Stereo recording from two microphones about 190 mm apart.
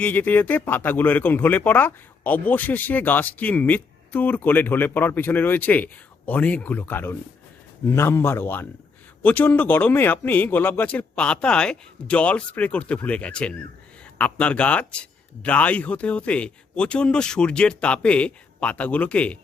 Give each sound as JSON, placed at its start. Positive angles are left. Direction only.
{"t": 0.0, "sound": "speech", "side_deg": 10}